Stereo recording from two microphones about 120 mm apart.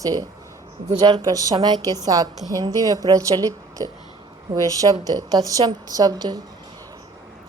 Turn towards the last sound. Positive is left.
turn(degrees=-35)  # may be behind; listen again after turning